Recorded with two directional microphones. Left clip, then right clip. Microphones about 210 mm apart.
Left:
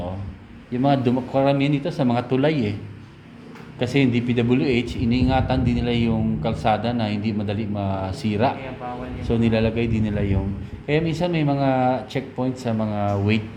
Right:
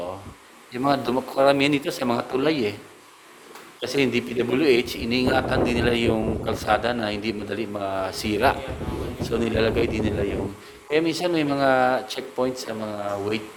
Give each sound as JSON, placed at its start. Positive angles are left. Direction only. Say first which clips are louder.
{"t": 0.7, "sound": "a man's voice", "louder": "left 2 dB", "side_deg": -25}
{"t": 2.4, "sound": "speech", "louder": "left 1 dB", "side_deg": -25}
{"t": 3.8, "sound": "a man's voice", "louder": "left 1 dB", "side_deg": -25}